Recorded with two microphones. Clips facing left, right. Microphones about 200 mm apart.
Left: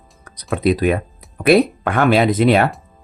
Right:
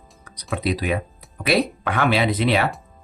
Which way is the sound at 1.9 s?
50° left (ahead or behind).